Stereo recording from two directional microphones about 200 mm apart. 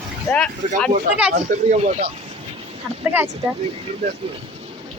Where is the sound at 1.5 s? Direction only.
45° right (ahead or behind).